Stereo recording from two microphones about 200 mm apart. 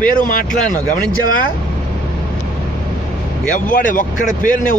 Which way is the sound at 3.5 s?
40° left (ahead or behind).